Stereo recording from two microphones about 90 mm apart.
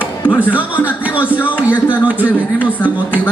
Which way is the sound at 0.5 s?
15° right (ahead or behind).